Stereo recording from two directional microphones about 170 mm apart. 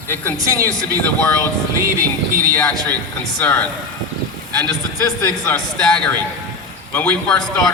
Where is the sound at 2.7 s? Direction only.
20° right (ahead or behind).